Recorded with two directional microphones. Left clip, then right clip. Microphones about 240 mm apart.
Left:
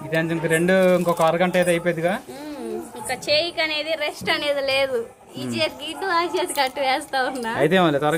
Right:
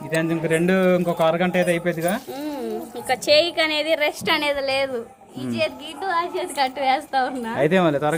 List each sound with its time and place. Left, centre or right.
0.1 s a woman's voice: centre
3.1 s a woman's voice: right
4.5 s a woman's voice: centre